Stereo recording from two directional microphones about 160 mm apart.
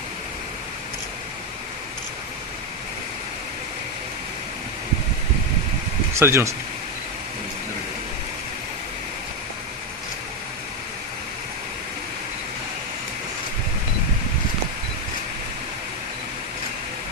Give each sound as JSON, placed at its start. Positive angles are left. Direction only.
{"t": 6.1, "sound": "speech", "side_deg": -15}